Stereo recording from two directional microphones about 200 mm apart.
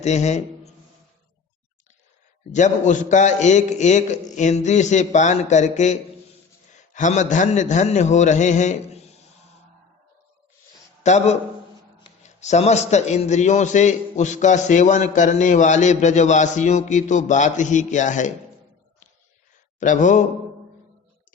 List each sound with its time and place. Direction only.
0.0 s a man's voice: 35° left (ahead or behind)
2.5 s a man's voice: 35° left (ahead or behind)
11.0 s a man's voice: 35° left (ahead or behind)
19.8 s a man's voice: 40° left (ahead or behind)